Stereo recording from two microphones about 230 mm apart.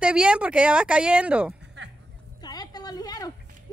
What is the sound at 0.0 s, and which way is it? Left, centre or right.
Speech, centre.